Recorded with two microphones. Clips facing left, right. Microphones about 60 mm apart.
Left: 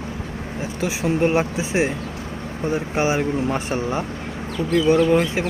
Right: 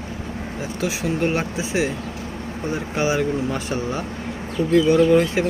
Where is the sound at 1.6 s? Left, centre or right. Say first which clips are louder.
Left 1 dB; left.